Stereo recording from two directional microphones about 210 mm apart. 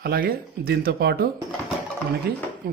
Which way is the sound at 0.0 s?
45° right (ahead or behind).